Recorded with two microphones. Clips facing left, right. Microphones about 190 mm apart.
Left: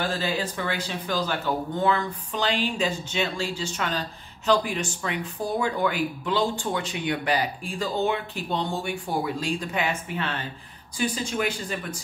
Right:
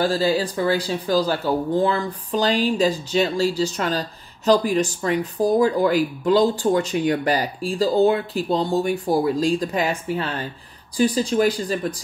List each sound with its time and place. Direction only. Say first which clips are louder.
0.0 s speech: right 7 dB; 35° right (ahead or behind)